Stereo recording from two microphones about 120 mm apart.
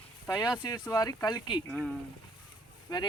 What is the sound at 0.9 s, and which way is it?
Speech, 30° left (ahead or behind).